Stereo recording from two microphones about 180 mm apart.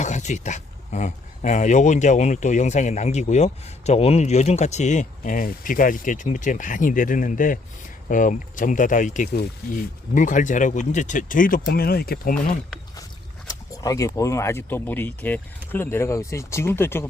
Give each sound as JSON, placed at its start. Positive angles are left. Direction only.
{"t": 0.0, "sound": "speech", "side_deg": 40}
{"t": 13.5, "sound": "speech", "side_deg": 20}